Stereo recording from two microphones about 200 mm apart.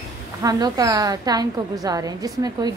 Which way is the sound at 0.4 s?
20° right (ahead or behind).